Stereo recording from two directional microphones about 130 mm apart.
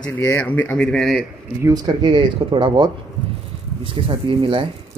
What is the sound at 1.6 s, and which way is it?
Speech, 30° right (ahead or behind).